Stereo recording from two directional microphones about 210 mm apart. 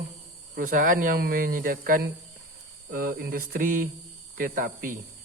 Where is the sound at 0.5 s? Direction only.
40° right (ahead or behind).